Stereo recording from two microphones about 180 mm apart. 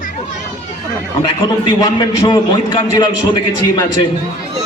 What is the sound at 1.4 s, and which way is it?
A man's voice, 20° left (ahead or behind).